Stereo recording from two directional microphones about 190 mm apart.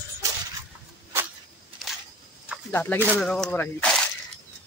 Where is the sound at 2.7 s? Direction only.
10° left (ahead or behind).